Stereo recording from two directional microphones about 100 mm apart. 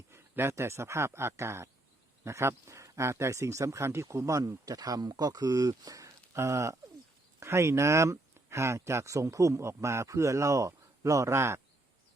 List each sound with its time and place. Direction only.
0.1 s speech: 25° right (ahead or behind)